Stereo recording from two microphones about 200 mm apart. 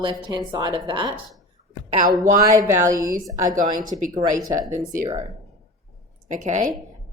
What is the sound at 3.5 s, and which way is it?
Speech, 40° right (ahead or behind).